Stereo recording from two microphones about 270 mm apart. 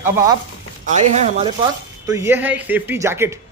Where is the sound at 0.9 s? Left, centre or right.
Right.